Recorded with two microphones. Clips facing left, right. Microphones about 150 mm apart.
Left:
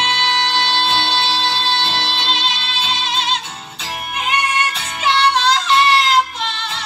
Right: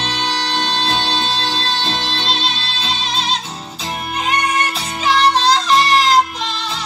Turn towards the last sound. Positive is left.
turn(degrees=-35)  # may be behind; listen again after turning